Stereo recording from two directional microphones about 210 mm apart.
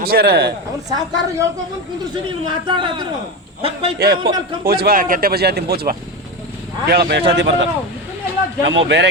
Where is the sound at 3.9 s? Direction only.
50° right (ahead or behind).